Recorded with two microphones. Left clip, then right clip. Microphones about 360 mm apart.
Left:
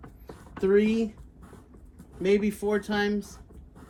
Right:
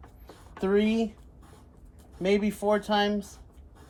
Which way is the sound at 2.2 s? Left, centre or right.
Centre.